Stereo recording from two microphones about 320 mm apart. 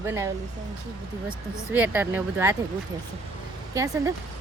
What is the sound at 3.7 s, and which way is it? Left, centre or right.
Speech, centre.